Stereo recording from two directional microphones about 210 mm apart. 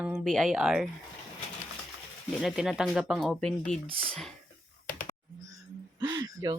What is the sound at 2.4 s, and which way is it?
Speech, centre (ahead or behind).